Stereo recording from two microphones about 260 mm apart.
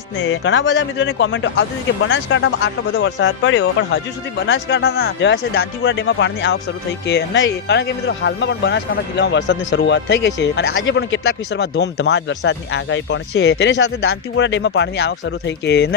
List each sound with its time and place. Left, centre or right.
0.2 s speech: left